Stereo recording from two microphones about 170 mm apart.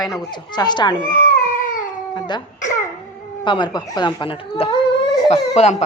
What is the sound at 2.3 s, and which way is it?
Babbling, 25° left (ahead or behind).